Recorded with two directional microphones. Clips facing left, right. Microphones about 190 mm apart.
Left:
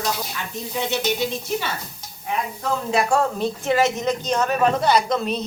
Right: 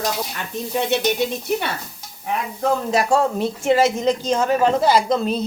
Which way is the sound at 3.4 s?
30° right (ahead or behind).